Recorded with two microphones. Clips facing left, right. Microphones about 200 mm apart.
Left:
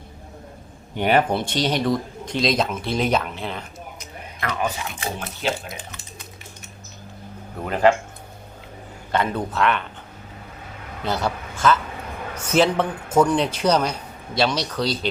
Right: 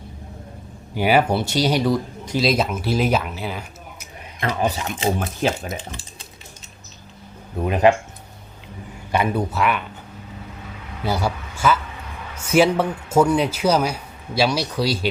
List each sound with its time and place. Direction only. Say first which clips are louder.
0.9 s a man's voice: right 1 dB; 5° right (ahead or behind)
4.4 s speech: right 4 dB; 25° right (ahead or behind)
7.6 s a man's voice: right 2 dB; 15° right (ahead or behind)
9.1 s a man's voice: right 2 dB; 10° right (ahead or behind)
11.0 s a man's voice: right 1 dB; 10° right (ahead or behind)